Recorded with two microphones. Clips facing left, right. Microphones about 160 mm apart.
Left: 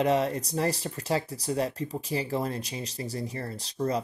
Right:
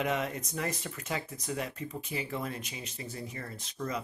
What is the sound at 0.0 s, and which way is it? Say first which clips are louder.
Speech: left 7 dB; 35° left (ahead or behind).